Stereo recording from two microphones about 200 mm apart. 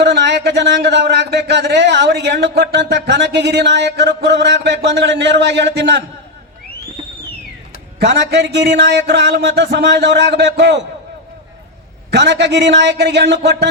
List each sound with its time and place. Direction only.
0.0 s speech: 55° right (ahead or behind)
7.9 s speech: 55° right (ahead or behind)
12.1 s speech: 55° right (ahead or behind)